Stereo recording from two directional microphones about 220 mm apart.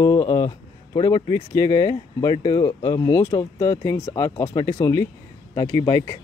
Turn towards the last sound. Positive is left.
turn(degrees=15)  # may be behind; listen again after turning